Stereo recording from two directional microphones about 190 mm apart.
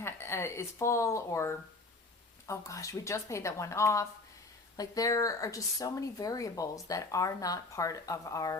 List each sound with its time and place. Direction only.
0.0 s speech: 15° left (ahead or behind)